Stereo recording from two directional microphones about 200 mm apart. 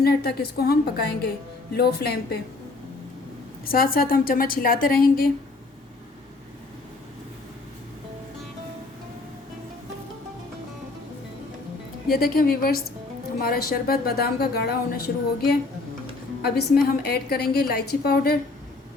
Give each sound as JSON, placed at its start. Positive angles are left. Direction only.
{"t": 0.0, "sound": "a woman's voice", "side_deg": 50}
{"t": 3.7, "sound": "a woman's voice", "side_deg": 45}
{"t": 12.1, "sound": "a woman's voice", "side_deg": 50}